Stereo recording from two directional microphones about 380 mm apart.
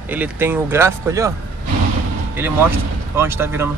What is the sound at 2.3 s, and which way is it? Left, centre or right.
Speech, centre.